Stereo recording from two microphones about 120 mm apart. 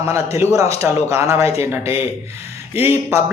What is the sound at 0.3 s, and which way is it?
Speech, 25° right (ahead or behind).